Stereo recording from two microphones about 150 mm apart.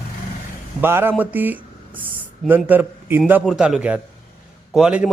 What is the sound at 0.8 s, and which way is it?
Speech, 15° right (ahead or behind).